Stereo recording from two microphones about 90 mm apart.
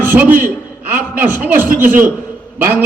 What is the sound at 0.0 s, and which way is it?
A man's voice, 20° right (ahead or behind).